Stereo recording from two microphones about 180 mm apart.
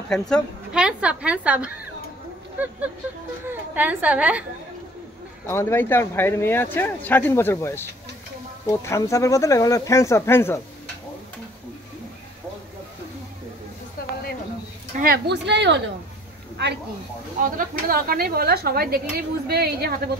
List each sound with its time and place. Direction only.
0.1 s a woman's voice: centre (ahead or behind)
5.5 s speech: 15° left (ahead or behind)
15.0 s a woman's voice: 65° right (ahead or behind)
17.4 s speech: 50° right (ahead or behind)